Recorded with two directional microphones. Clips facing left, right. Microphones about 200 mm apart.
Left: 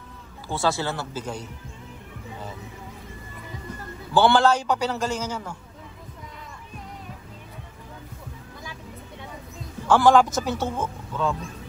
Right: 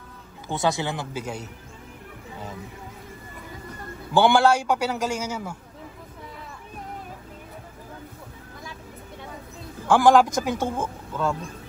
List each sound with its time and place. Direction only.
0.5 s a man's voice: 20° right (ahead or behind)
4.1 s a man's voice: 10° right (ahead or behind)
9.8 s a man's voice: 10° right (ahead or behind)